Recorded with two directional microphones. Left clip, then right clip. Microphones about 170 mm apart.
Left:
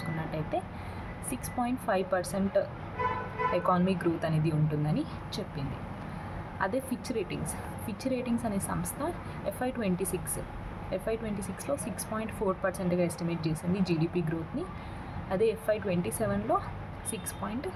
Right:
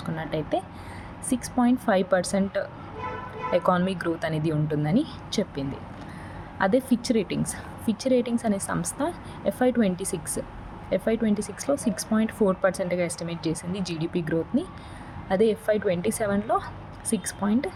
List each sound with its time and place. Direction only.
0.3 s speech: 45° right (ahead or behind)